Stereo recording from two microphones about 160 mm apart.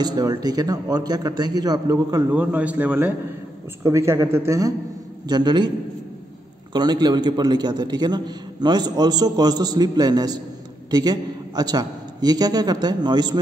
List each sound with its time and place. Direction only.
0.0 s a man's voice: 25° right (ahead or behind)
2.3 s a man's voice: 10° right (ahead or behind); by 5.7 s 30° right (ahead or behind)
6.7 s a man's voice: 25° right (ahead or behind)